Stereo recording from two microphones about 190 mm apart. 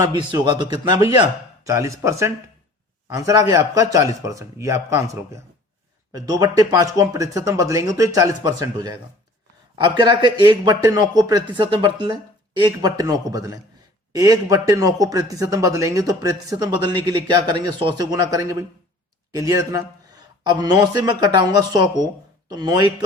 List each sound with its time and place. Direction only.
0.0 s a man's voice: 25° right (ahead or behind)